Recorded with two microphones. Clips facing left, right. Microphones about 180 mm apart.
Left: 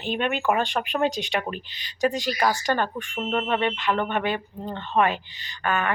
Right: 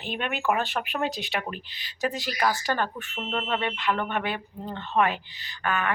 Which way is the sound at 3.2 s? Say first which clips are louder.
Left 5 dB; 10° left (ahead or behind).